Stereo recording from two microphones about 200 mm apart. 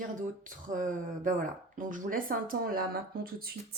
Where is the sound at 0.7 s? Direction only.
40° right (ahead or behind).